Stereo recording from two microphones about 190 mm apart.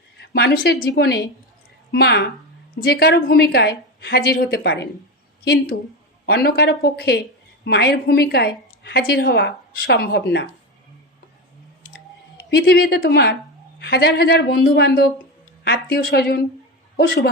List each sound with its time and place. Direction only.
0.2 s a woman's voice: 55° left (ahead or behind)
6.2 s a woman's voice: 55° left (ahead or behind)
12.5 s a woman's voice: 55° left (ahead or behind)